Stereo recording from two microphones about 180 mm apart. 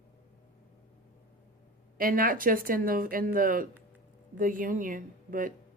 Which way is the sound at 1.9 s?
50° right (ahead or behind).